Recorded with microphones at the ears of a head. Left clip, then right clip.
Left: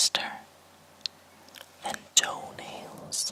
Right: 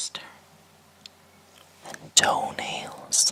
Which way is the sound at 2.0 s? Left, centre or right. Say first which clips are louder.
Right 7 dB; right.